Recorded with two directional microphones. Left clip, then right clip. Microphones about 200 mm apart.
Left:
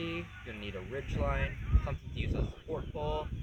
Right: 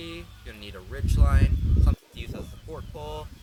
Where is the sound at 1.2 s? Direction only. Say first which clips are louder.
Right 3 dB; 15° right (ahead or behind).